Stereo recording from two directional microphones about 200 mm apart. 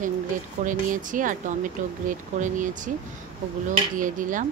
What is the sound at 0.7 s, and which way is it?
Speech, 40° right (ahead or behind).